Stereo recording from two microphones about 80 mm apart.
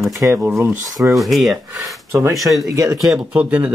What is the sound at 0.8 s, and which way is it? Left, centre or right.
Speech, right.